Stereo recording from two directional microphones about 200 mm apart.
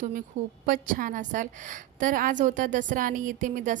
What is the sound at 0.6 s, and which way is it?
A woman's voice, 40° right (ahead or behind).